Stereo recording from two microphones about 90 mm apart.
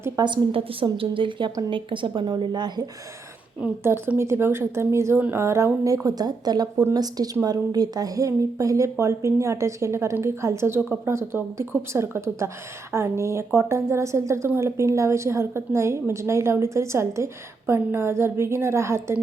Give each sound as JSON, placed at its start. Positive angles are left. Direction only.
{"t": 0.2, "sound": "speech", "side_deg": -45}
{"t": 0.5, "sound": "a woman's voice", "side_deg": -90}
{"t": 3.8, "sound": "a woman's voice", "side_deg": -25}